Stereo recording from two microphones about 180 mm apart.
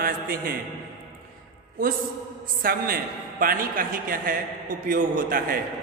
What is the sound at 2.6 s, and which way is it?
A man's voice, 55° right (ahead or behind).